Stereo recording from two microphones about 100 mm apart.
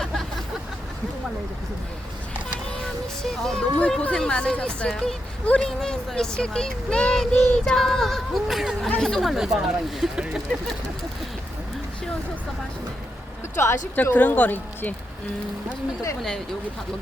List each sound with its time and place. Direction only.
0.0 s vehicle: 5° left (ahead or behind)
3.2 s speech: 5° left (ahead or behind)
13.6 s speech: 20° left (ahead or behind)